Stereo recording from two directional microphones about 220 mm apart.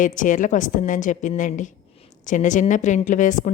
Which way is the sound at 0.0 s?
35° left (ahead or behind).